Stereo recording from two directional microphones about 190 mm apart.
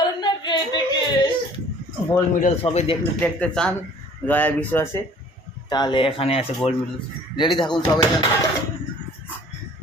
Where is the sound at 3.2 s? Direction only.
5° left (ahead or behind).